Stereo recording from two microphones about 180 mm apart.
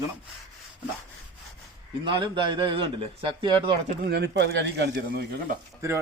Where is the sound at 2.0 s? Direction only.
25° right (ahead or behind).